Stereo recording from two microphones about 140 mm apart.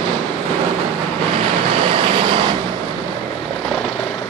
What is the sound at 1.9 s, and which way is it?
Vehicle, 40° right (ahead or behind).